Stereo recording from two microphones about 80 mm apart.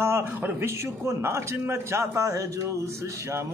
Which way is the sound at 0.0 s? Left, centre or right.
Right.